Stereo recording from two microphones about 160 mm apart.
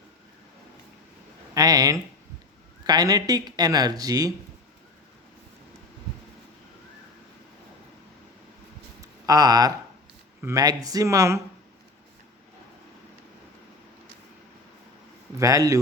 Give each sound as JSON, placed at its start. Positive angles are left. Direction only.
{"t": 1.5, "sound": "speech", "side_deg": -25}
{"t": 9.0, "sound": "a sound", "side_deg": -25}
{"t": 10.4, "sound": "speech", "side_deg": -20}
{"t": 15.4, "sound": "speech", "side_deg": -20}